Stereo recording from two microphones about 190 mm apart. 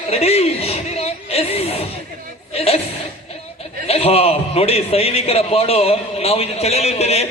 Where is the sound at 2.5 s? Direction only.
30° left (ahead or behind).